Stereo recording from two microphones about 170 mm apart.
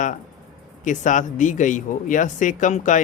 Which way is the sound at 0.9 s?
50° left (ahead or behind).